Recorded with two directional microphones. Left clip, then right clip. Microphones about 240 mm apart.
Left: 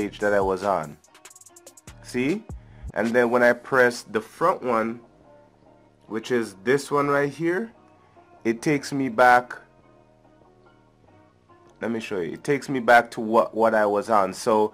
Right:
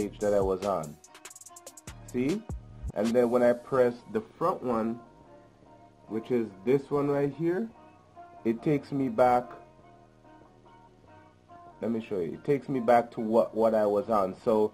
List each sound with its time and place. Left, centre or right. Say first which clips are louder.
0.0 s speech: left 5 dB; centre
0.4 s speech: left 5 dB; left
0.8 s music: left 3 dB; centre
3.0 s speech: left 4 dB; centre
3.3 s speech: left 5 dB; centre
6.1 s speech: left 5 dB; centre
11.8 s speech: left 4 dB; centre
13.8 s speech: left 5 dB; centre